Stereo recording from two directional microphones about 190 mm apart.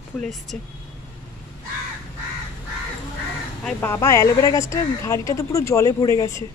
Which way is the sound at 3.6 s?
10° left (ahead or behind).